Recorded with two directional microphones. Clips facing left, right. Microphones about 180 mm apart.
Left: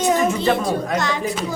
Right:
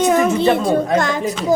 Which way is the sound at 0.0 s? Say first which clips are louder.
Right 4 dB; 60° right (ahead or behind).